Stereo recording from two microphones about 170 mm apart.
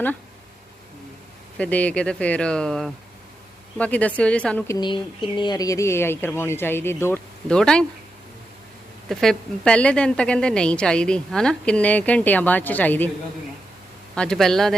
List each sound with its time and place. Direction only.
1.5 s a woman's voice: 10° left (ahead or behind)
4.7 s a woman's voice: 25° left (ahead or behind); by 7.9 s 5° left (ahead or behind)
9.0 s a woman's voice: centre (ahead or behind)
14.2 s speech: 5° left (ahead or behind)